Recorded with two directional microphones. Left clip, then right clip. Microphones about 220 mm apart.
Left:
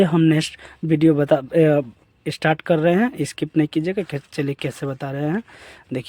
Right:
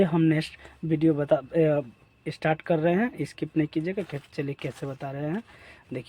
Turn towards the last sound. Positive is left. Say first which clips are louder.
# left 8 dB
turn(degrees=50)  # may be behind; listen again after turning